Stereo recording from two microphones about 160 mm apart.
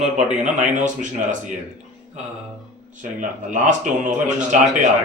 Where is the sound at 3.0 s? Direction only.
50° right (ahead or behind).